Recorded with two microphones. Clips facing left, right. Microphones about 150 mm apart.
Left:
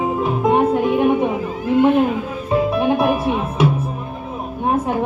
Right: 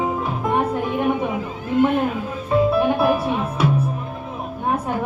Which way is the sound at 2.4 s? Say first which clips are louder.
Even; 20° left (ahead or behind).